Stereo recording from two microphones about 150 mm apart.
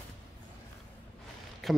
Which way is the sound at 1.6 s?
Centre (ahead or behind).